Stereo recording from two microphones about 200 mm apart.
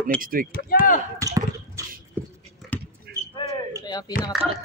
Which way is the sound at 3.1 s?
55° right (ahead or behind).